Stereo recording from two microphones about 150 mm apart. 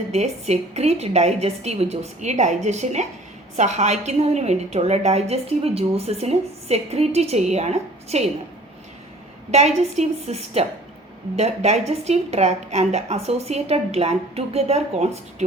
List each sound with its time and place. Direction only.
0.1 s a woman's voice: 45° right (ahead or behind)
9.5 s a woman's voice: 45° right (ahead or behind)